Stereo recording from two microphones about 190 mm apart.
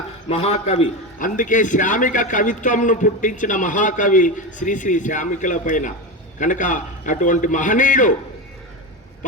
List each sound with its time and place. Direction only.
0.3 s a man's voice: 35° left (ahead or behind)